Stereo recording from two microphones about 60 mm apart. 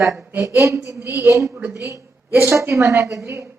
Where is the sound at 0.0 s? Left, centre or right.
Centre.